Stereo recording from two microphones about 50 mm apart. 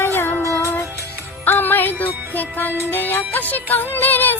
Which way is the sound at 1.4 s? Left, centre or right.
Left.